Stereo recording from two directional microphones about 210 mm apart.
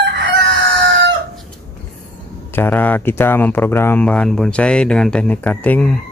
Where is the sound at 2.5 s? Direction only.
10° left (ahead or behind).